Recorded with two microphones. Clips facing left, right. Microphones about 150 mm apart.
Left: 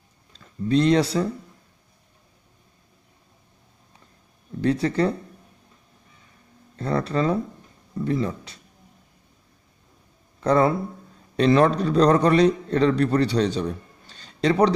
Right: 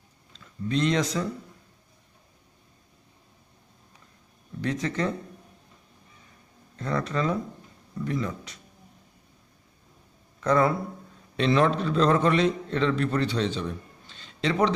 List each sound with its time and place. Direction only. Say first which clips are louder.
0.3 s speech: left 7 dB; 35° left (ahead or behind)
4.6 s speech: left 7 dB; 35° left (ahead or behind)
6.8 s speech: left 4 dB; 35° left (ahead or behind)
10.4 s speech: left 3 dB; 30° left (ahead or behind)
11.3 s a man's voice: left 5 dB; 40° left (ahead or behind)